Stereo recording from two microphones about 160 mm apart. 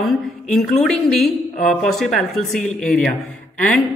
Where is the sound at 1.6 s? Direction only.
Centre (ahead or behind).